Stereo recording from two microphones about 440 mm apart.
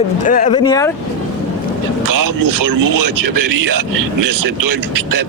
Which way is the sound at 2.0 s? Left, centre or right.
Right.